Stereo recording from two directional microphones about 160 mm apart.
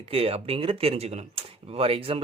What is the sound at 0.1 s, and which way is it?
Speech, 40° right (ahead or behind).